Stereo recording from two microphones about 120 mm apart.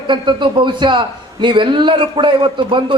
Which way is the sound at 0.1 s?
40° right (ahead or behind).